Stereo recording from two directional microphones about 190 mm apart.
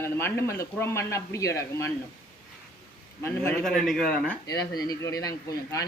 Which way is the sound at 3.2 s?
10° left (ahead or behind).